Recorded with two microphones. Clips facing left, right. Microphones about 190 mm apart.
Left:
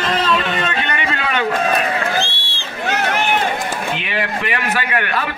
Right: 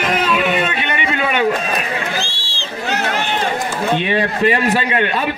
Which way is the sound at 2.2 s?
60° left (ahead or behind).